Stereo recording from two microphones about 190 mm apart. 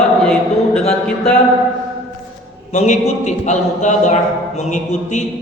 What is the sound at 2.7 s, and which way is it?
A man's voice, 40° left (ahead or behind).